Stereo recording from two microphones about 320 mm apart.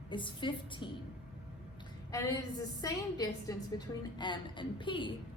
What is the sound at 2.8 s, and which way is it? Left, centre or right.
A woman's voice, centre.